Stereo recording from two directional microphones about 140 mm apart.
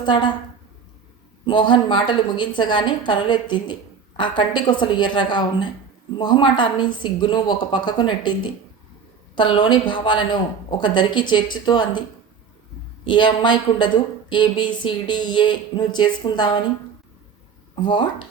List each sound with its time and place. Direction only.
0.0 s a woman's voice: 35° left (ahead or behind)
1.5 s a woman's voice: 35° left (ahead or behind)
9.3 s a woman's voice: 35° left (ahead or behind)
13.1 s a woman's voice: 35° left (ahead or behind)
17.7 s a woman's voice: 35° left (ahead or behind)